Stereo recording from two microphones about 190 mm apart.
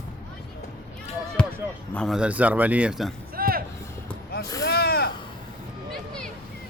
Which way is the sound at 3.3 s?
50° right (ahead or behind).